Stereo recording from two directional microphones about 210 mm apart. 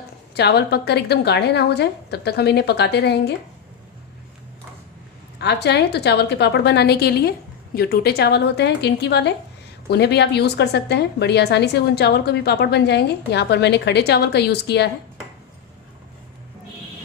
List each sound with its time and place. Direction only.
0.3 s a woman's voice: 50° left (ahead or behind)
5.4 s a woman's voice: 55° left (ahead or behind)